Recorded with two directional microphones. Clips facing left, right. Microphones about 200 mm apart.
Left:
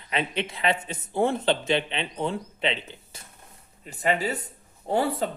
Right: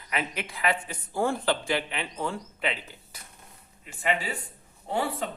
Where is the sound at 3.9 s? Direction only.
40° left (ahead or behind).